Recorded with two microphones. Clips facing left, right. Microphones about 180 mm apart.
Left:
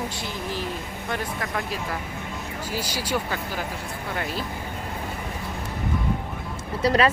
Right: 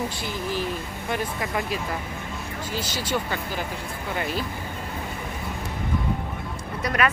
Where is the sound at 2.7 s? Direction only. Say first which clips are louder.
Even; 10° left (ahead or behind).